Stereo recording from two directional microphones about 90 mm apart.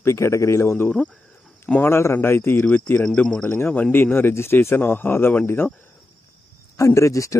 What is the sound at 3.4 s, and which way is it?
Speech, 25° left (ahead or behind).